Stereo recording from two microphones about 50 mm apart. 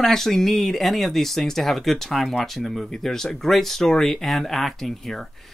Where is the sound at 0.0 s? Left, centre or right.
Centre.